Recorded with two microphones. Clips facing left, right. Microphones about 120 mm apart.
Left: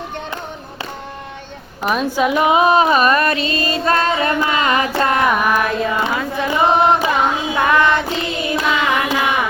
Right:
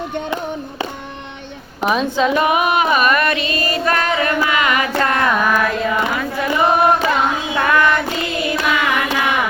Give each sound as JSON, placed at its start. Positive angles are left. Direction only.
{"t": 1.8, "sound": "a woman's voice", "side_deg": 0}
{"t": 2.1, "sound": "female singing", "side_deg": 15}
{"t": 4.9, "sound": "carnatic music", "side_deg": 20}
{"t": 5.2, "sound": "singing", "side_deg": 10}